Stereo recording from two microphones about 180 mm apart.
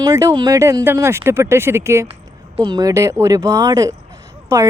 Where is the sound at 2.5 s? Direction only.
30° right (ahead or behind).